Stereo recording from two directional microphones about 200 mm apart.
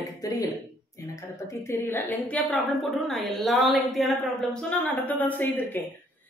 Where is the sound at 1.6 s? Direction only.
10° left (ahead or behind).